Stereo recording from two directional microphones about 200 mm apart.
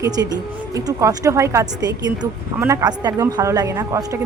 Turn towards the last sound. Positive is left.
turn(degrees=-15)  # may be behind; listen again after turning